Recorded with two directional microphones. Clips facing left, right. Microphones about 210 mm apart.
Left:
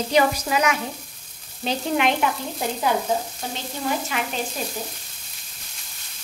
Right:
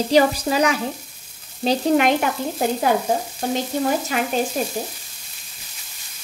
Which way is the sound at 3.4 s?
50° right (ahead or behind).